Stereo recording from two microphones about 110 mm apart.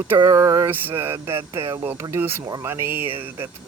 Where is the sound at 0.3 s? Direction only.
30° right (ahead or behind).